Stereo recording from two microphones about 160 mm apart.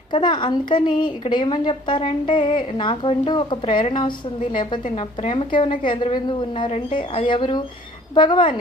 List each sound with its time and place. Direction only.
0.1 s speech: 30° left (ahead or behind)
5.2 s speech: 35° left (ahead or behind)